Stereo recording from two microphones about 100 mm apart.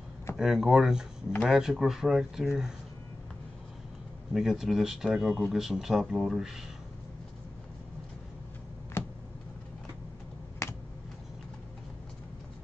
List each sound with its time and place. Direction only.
0.4 s speech: 5° right (ahead or behind)
4.3 s speech: 5° right (ahead or behind)
10.6 s finger snapping: 30° left (ahead or behind)